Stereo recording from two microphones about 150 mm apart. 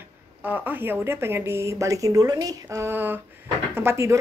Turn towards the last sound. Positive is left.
turn(degrees=-20)  # may be behind; listen again after turning